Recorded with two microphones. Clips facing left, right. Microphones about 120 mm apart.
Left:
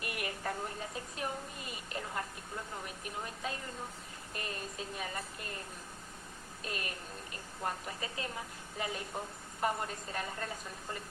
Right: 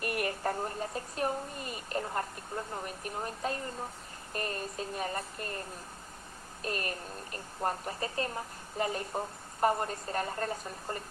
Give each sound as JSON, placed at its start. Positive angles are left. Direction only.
{"t": 0.0, "sound": "a woman's voice", "side_deg": -45}
{"t": 6.6, "sound": "a woman's voice", "side_deg": -45}